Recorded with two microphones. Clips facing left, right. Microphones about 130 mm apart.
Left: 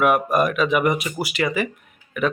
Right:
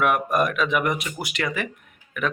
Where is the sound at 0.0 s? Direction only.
5° left (ahead or behind).